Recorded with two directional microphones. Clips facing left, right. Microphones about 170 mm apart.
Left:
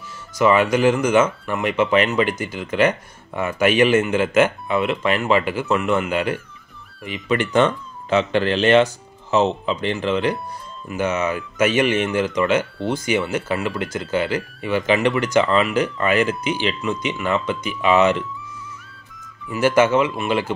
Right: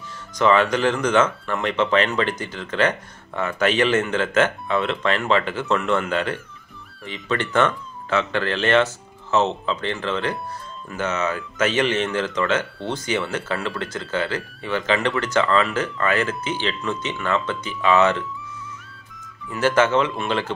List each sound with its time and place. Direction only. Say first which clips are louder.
0.3 s speech: left 2 dB; 10° left (ahead or behind)
19.4 s speech: left 3 dB; 10° left (ahead or behind)